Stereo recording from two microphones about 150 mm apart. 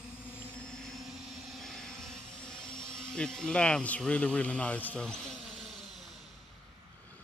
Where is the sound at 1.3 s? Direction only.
Centre (ahead or behind).